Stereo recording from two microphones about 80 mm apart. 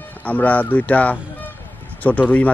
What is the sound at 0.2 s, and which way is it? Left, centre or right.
Speech, centre.